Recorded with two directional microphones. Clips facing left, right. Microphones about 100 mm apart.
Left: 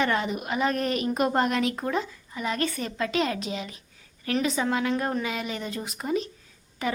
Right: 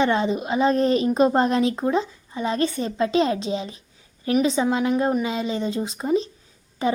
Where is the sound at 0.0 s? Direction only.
25° right (ahead or behind).